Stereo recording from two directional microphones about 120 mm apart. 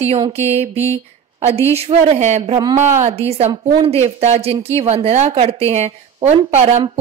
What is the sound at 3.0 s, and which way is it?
Speech, 60° right (ahead or behind).